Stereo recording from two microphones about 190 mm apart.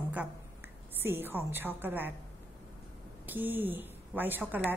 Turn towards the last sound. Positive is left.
turn(degrees=-10)  # may be behind; listen again after turning